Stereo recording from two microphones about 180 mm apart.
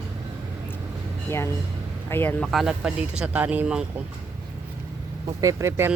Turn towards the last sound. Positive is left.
turn(degrees=-15)  # may be behind; listen again after turning